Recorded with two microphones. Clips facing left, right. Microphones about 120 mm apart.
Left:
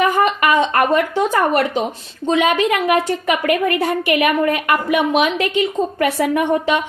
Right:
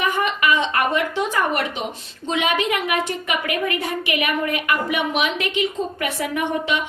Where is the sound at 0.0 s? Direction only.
40° left (ahead or behind).